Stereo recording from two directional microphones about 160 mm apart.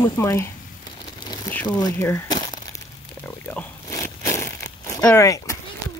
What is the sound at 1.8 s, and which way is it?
Crumpling, 20° left (ahead or behind).